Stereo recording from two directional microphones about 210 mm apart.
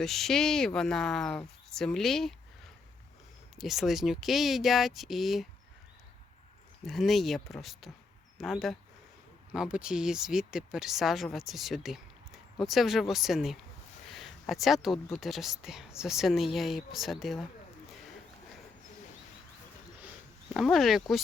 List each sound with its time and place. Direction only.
0.0 s speech: centre (ahead or behind)
3.5 s speech: centre (ahead or behind)
6.8 s speech: centre (ahead or behind)
20.5 s speech: centre (ahead or behind)